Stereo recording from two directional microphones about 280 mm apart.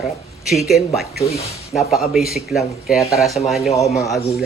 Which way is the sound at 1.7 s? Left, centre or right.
Centre.